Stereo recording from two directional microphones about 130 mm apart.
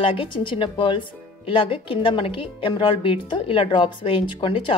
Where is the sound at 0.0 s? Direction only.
40° left (ahead or behind).